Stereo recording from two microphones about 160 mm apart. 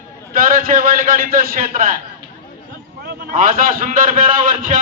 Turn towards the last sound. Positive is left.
turn(degrees=-60)  # may be behind; listen again after turning